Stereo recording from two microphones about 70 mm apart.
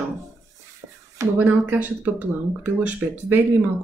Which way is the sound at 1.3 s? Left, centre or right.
Right.